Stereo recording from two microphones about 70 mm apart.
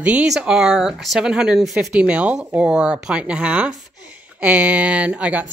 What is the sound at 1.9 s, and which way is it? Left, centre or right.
Speech, centre.